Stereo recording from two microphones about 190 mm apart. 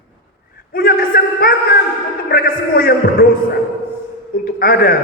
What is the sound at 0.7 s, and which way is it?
A man's voice, 50° left (ahead or behind).